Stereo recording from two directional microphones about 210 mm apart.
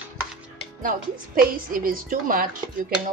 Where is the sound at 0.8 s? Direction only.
40° right (ahead or behind).